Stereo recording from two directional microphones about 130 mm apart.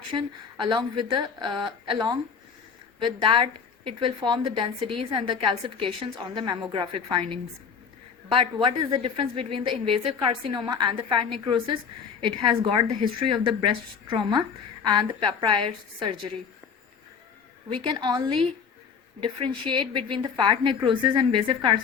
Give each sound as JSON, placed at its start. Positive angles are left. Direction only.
{"t": 0.1, "sound": "a woman's voice", "side_deg": -35}
{"t": 17.9, "sound": "a woman's voice", "side_deg": -30}